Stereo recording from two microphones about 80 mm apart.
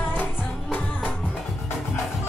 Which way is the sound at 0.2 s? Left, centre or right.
Left.